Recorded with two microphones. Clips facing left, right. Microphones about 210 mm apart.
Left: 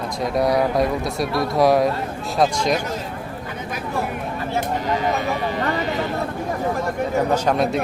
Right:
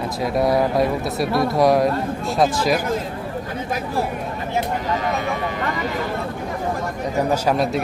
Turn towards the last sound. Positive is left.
turn(degrees=0)  # may be behind; listen again after turning